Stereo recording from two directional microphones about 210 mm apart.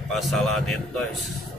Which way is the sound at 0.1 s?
Centre (ahead or behind).